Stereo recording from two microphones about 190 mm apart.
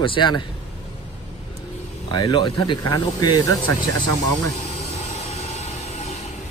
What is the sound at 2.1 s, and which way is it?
Speech, 25° left (ahead or behind).